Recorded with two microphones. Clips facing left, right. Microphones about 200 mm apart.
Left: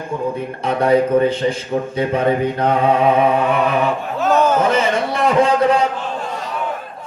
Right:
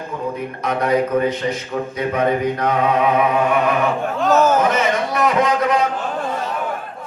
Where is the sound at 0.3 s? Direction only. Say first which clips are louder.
Left 2 dB; 30° left (ahead or behind).